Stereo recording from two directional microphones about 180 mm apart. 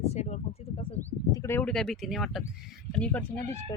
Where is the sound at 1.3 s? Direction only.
15° left (ahead or behind).